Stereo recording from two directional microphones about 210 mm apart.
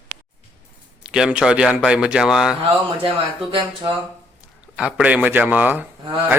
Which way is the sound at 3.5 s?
25° right (ahead or behind).